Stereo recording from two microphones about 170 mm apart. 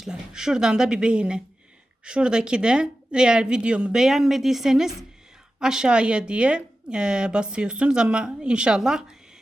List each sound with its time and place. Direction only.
0.0 s speech: 5° right (ahead or behind)